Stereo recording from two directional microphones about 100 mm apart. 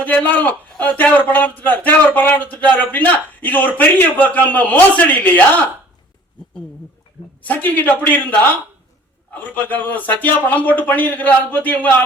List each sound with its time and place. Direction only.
0.0 s a man's voice: 15° left (ahead or behind)
7.4 s a man's voice: 15° left (ahead or behind)
9.6 s a man's voice: 15° left (ahead or behind)